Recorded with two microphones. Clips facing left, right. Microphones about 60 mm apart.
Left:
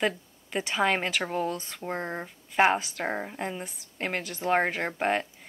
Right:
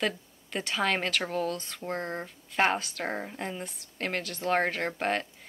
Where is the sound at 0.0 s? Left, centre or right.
Centre.